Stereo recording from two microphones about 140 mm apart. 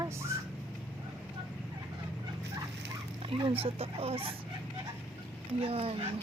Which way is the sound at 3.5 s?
45° right (ahead or behind).